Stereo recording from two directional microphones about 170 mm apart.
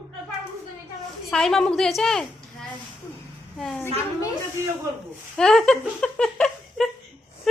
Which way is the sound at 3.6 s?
5° left (ahead or behind).